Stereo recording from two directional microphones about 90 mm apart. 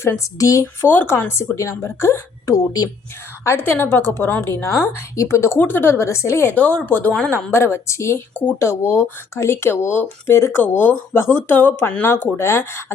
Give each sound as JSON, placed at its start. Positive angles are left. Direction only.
{"t": 0.3, "sound": "speech", "side_deg": 40}
{"t": 0.6, "sound": "a woman's voice", "side_deg": 20}
{"t": 6.6, "sound": "speech", "side_deg": 15}
{"t": 7.3, "sound": "speech", "side_deg": 25}